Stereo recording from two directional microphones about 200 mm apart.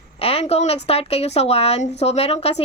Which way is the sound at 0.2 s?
30° left (ahead or behind).